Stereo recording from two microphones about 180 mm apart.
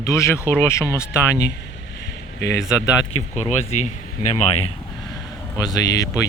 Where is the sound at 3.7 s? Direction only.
40° left (ahead or behind).